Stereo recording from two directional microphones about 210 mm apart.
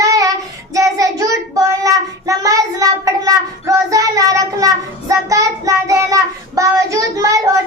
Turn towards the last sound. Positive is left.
turn(degrees=-15)  # may be behind; listen again after turning